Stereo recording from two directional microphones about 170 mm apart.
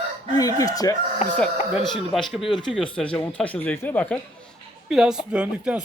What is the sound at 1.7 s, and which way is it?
Speech, centre (ahead or behind).